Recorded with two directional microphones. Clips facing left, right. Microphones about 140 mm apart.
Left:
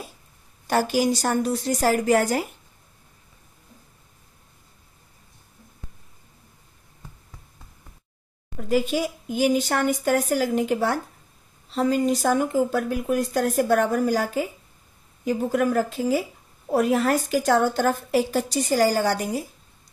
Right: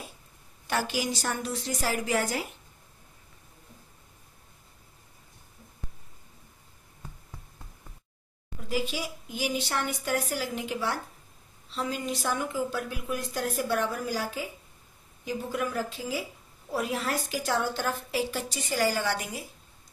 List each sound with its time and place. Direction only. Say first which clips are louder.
0.7 s speech: left 8 dB; 45° left (ahead or behind)
8.5 s speech: left 9 dB; 50° left (ahead or behind)